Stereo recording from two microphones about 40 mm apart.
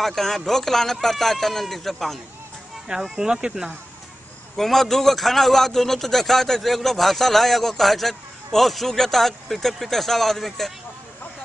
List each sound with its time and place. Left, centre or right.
0.0 s a man's voice: centre
2.9 s speech: centre
4.6 s a man's voice: centre